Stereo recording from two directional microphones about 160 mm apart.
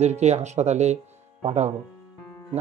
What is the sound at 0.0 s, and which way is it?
Speech, 45° right (ahead or behind).